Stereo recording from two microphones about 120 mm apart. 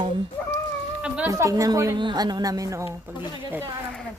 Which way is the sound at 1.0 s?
10° right (ahead or behind).